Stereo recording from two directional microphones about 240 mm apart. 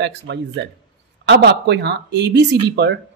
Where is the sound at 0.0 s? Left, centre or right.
Right.